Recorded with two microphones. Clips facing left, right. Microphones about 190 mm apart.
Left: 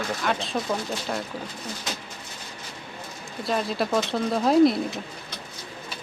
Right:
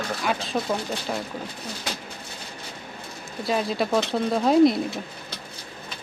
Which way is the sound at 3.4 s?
Centre (ahead or behind).